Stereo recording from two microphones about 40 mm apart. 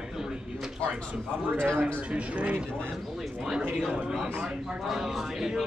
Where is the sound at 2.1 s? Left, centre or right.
Right.